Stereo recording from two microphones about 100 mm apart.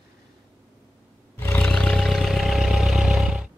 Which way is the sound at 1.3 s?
25° left (ahead or behind).